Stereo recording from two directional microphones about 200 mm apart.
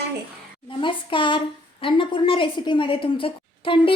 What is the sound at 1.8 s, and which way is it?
A woman's voice, 25° left (ahead or behind).